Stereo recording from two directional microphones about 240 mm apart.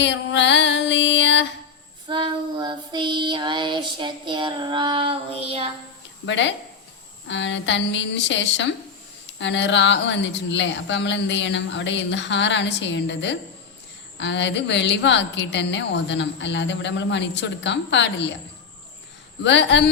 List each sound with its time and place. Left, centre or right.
0.0 s music: left
2.0 s child singing: centre
6.2 s a woman's voice: left
19.4 s a woman's voice: left